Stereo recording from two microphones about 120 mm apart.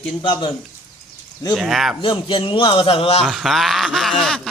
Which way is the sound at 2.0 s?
45° left (ahead or behind).